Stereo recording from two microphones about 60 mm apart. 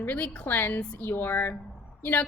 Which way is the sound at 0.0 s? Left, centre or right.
Left.